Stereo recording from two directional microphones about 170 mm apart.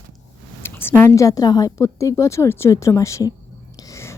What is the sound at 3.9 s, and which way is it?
Whispering, 15° left (ahead or behind).